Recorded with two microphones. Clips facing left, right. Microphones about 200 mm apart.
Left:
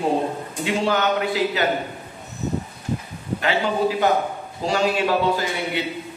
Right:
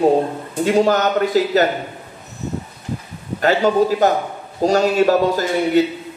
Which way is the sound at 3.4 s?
40° right (ahead or behind).